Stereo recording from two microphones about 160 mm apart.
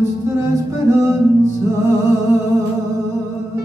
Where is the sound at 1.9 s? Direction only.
15° right (ahead or behind).